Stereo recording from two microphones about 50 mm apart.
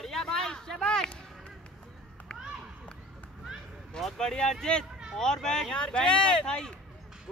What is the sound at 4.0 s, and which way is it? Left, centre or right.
Speech, centre.